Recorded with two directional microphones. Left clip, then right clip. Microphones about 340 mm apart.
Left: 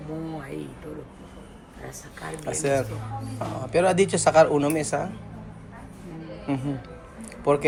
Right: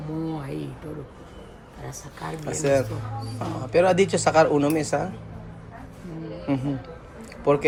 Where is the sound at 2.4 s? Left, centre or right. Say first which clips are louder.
Right 2 dB; centre.